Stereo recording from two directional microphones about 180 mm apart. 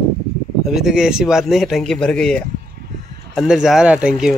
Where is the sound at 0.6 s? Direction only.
Centre (ahead or behind).